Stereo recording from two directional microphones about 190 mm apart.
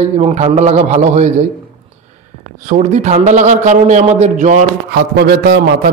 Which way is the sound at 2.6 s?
40° right (ahead or behind).